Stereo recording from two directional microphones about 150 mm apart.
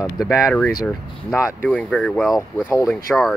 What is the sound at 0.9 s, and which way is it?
Speech, 10° left (ahead or behind).